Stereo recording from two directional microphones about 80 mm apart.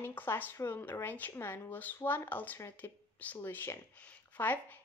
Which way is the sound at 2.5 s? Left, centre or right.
Left.